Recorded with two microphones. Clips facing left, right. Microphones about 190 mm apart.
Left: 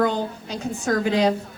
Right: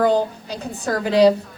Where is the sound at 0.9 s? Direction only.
35° right (ahead or behind).